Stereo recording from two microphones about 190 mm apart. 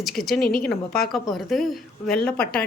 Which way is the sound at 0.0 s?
Centre (ahead or behind).